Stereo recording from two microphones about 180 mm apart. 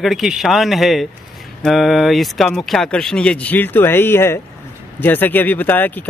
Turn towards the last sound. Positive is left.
turn(degrees=10)  # may be behind; listen again after turning